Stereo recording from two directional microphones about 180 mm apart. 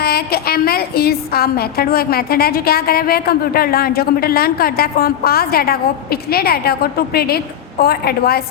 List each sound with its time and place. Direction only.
0.0 s a woman's voice: 60° left (ahead or behind)